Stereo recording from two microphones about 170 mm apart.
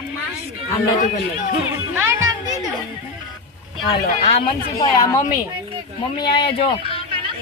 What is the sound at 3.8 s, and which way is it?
Speech, 30° left (ahead or behind).